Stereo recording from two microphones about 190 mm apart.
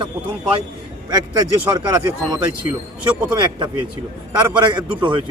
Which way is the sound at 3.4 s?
25° right (ahead or behind).